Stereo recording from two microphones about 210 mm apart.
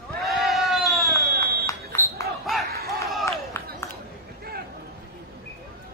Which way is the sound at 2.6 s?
45° right (ahead or behind).